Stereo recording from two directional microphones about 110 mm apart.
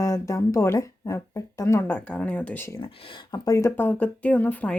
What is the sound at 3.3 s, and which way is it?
Speech, 30° left (ahead or behind).